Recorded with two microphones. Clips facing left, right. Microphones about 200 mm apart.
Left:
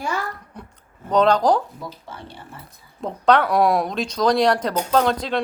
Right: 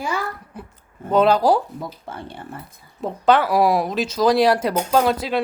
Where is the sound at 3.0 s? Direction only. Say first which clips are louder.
Even; 5° right (ahead or behind).